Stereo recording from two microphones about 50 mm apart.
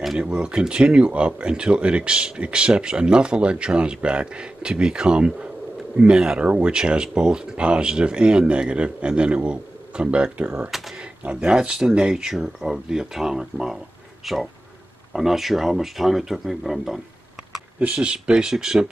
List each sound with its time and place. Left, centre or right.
0.2 s speech: centre
10.7 s speech: centre
11.5 s speech: centre
12.3 s speech: centre
17.7 s speech: right